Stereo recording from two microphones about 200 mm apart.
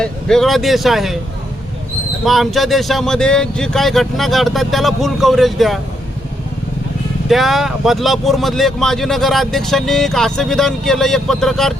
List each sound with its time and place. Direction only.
0.0 s speech: centre (ahead or behind)
2.2 s speech: centre (ahead or behind)
7.3 s speech: centre (ahead or behind)